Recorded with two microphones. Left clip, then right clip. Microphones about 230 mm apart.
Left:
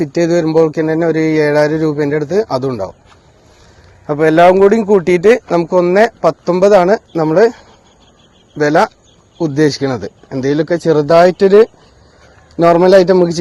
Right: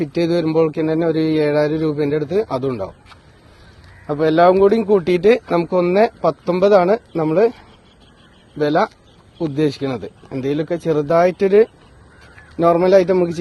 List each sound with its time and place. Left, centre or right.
0.0 s speech: left
4.0 s speech: left
8.5 s speech: left